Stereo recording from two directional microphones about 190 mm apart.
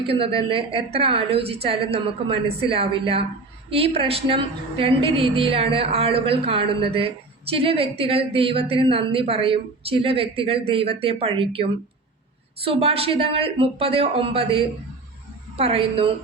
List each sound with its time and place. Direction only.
0.1 s a woman's voice: 30° right (ahead or behind)